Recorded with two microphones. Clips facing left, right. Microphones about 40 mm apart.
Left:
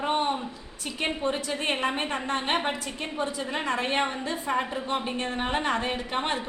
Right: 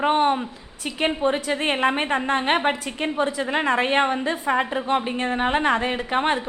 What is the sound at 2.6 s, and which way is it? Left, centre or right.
A woman's voice, right.